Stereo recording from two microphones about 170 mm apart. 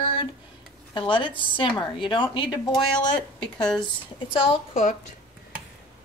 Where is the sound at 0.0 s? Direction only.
30° left (ahead or behind).